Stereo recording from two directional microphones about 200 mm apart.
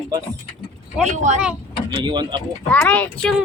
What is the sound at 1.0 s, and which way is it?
Speech, 35° right (ahead or behind).